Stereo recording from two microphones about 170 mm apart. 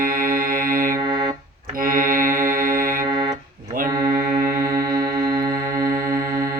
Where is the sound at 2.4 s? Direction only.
55° right (ahead or behind).